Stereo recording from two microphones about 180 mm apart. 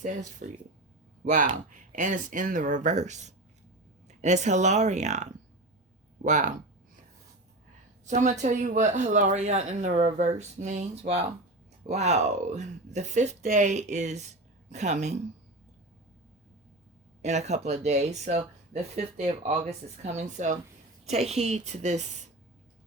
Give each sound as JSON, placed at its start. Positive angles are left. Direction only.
{"t": 0.0, "sound": "speech", "side_deg": -40}
{"t": 8.0, "sound": "speech", "side_deg": -40}
{"t": 17.2, "sound": "speech", "side_deg": -40}